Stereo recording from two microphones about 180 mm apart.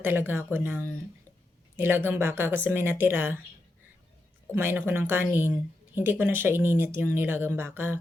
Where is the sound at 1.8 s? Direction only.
10° right (ahead or behind).